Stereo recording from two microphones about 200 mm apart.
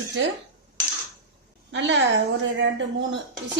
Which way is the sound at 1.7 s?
65° right (ahead or behind).